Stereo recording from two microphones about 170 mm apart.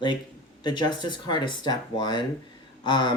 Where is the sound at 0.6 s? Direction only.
25° left (ahead or behind).